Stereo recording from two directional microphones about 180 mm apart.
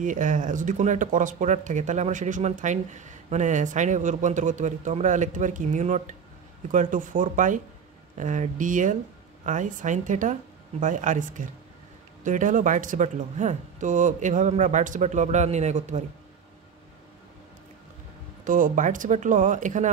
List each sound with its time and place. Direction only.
0.0 s speech: 45° right (ahead or behind)
18.4 s speech: 45° right (ahead or behind)